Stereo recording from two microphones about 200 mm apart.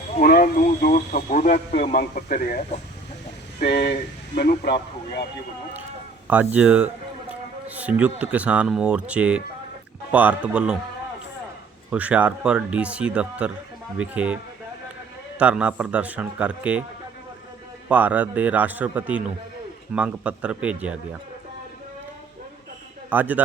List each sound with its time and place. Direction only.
0.2 s speech: 45° left (ahead or behind)
3.6 s speech: 55° left (ahead or behind)
6.2 s speech: 5° right (ahead or behind)
11.9 s speech: 5° right (ahead or behind)
15.4 s speech: 5° right (ahead or behind)
17.8 s speech: 5° right (ahead or behind)
23.0 s speech: 10° right (ahead or behind)